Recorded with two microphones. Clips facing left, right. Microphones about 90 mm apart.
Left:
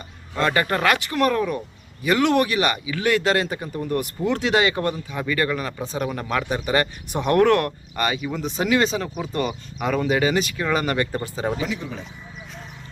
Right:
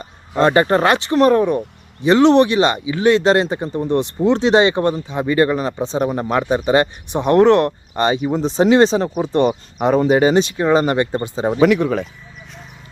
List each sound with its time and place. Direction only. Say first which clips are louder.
0.0 s speech: right 7 dB; 30° right (ahead or behind)
11.6 s speech: right 14 dB; 70° right (ahead or behind)